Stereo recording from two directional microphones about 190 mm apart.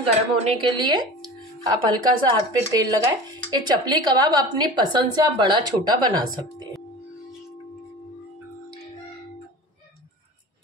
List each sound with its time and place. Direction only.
0.0 s speech: 30° right (ahead or behind)